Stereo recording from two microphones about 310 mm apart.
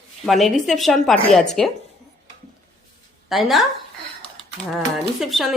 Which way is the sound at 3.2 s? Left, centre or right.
Centre.